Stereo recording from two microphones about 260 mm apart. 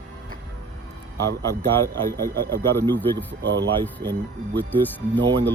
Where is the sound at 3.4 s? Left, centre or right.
Right.